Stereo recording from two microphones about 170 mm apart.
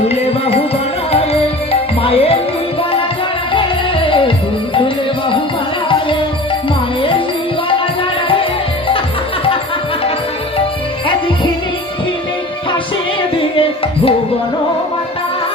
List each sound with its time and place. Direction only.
0.1 s music: 35° left (ahead or behind)
3.5 s music: 30° left (ahead or behind)
13.3 s music: 30° left (ahead or behind)